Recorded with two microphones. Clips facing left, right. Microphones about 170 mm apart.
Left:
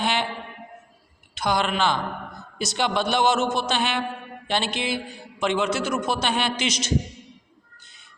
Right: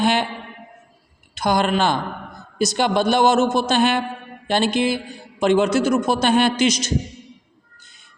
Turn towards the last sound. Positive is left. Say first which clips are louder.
# right 8 dB
turn(degrees=-40)  # may be behind; listen again after turning